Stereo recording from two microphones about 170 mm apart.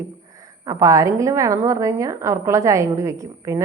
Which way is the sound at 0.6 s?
20° right (ahead or behind).